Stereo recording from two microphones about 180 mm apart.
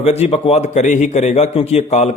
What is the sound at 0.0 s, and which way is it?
A man's voice, 35° left (ahead or behind).